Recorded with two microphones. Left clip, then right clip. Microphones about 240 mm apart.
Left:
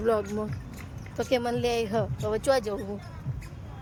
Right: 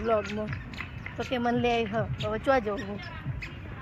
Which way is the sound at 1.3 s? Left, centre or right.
Left.